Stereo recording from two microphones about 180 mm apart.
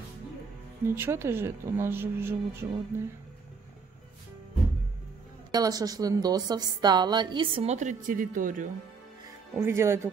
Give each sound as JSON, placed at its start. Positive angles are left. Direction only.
{"t": 0.8, "sound": "speech", "side_deg": -15}
{"t": 5.5, "sound": "a woman's voice", "side_deg": -20}
{"t": 9.6, "sound": "speech", "side_deg": -15}